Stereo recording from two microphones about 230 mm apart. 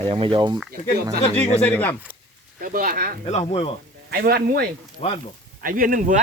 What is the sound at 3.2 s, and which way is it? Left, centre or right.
Speech, left.